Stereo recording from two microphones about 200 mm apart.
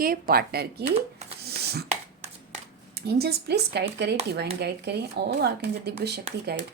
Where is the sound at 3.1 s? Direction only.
55° right (ahead or behind).